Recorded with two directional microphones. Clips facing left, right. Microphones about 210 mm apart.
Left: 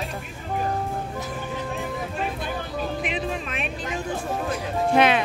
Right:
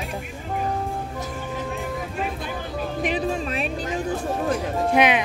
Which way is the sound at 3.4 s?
35° right (ahead or behind).